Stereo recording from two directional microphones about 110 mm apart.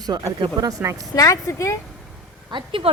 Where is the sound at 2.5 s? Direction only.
50° right (ahead or behind).